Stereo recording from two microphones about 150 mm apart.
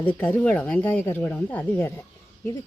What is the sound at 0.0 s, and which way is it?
Speech, 10° left (ahead or behind).